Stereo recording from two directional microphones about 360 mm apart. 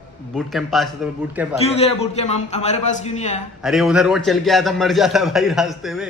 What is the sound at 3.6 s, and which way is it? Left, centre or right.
Speech, centre.